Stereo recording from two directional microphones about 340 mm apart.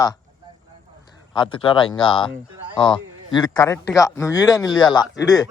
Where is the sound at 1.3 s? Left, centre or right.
Centre.